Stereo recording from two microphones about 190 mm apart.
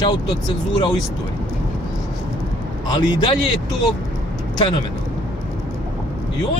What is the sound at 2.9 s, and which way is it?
Speech, 25° left (ahead or behind).